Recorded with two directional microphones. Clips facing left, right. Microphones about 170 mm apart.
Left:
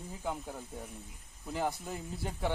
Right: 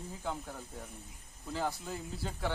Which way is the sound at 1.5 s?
15° left (ahead or behind).